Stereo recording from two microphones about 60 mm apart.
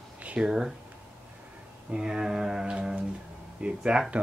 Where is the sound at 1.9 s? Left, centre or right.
Centre.